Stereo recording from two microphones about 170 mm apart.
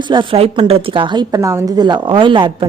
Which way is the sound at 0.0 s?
30° right (ahead or behind).